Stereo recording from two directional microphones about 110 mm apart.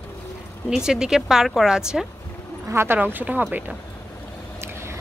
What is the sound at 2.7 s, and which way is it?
Speech, 20° right (ahead or behind).